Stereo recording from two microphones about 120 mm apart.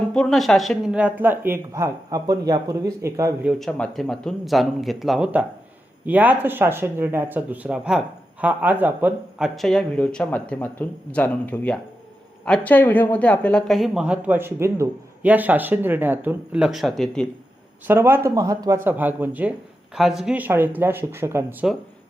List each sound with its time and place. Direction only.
0.1 s speech: 5° left (ahead or behind)
0.9 s speech: 10° right (ahead or behind)
3.6 s speech: 5° left (ahead or behind); by 9.5 s 15° right (ahead or behind)
9.6 s speech: 5° left (ahead or behind)
17.8 s speech: 20° right (ahead or behind)
18.9 s speech: 15° right (ahead or behind)
20.0 s speech: 5° right (ahead or behind); by 21.4 s 20° right (ahead or behind)
21.6 s speech: 5° right (ahead or behind)